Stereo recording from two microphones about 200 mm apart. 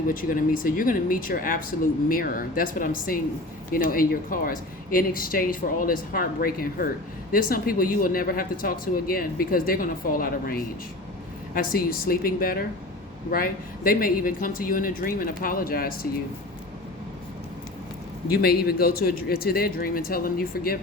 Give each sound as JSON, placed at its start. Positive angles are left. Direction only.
{"t": 0.1, "sound": "speech", "side_deg": 45}
{"t": 18.3, "sound": "speech", "side_deg": 50}